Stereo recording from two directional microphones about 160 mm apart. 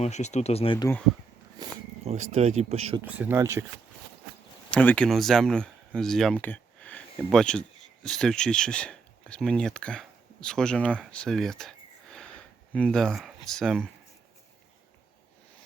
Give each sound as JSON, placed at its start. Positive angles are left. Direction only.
{"t": 0.0, "sound": "speech", "side_deg": 45}
{"t": 1.6, "sound": "cat", "side_deg": -25}
{"t": 2.0, "sound": "speech", "side_deg": -40}
{"t": 3.0, "sound": "speech", "side_deg": -10}
{"t": 4.7, "sound": "speech", "side_deg": 5}